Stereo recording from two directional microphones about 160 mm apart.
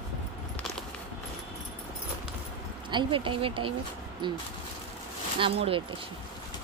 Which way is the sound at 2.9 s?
30° right (ahead or behind).